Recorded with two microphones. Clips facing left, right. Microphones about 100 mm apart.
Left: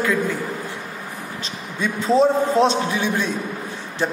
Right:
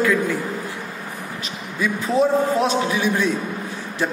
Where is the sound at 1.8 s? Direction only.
30° left (ahead or behind).